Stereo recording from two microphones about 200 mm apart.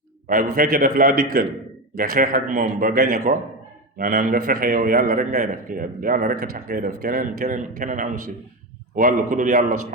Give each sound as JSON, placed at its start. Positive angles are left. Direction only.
{"t": 0.3, "sound": "a man's voice", "side_deg": -45}